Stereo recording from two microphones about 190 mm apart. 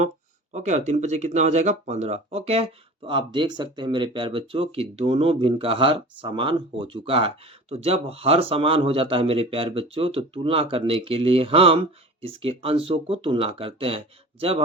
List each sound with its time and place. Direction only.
0.5 s speech: 40° right (ahead or behind)